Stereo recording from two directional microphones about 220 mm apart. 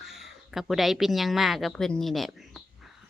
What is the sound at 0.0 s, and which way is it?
A woman's voice, centre (ahead or behind).